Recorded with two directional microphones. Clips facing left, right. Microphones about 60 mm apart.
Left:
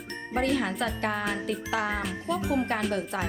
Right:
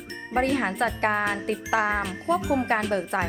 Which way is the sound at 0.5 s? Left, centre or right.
Right.